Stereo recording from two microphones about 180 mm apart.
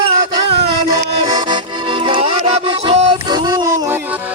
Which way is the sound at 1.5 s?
25° right (ahead or behind).